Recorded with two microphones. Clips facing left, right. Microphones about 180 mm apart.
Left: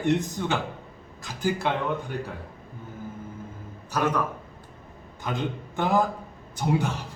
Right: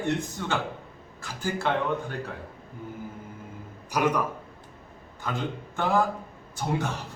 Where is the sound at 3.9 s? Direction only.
10° right (ahead or behind).